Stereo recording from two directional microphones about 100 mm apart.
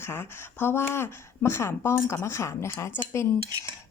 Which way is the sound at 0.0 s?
25° left (ahead or behind).